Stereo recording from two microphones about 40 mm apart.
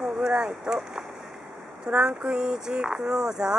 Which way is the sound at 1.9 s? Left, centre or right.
Right.